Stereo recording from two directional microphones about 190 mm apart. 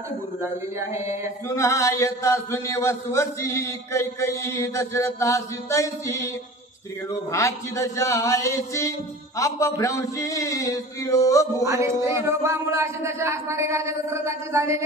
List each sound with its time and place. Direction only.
1.5 s a man's voice: 15° left (ahead or behind)
11.6 s speech: 15° right (ahead or behind)